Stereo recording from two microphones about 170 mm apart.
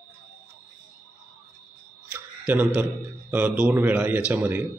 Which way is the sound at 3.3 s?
10° right (ahead or behind).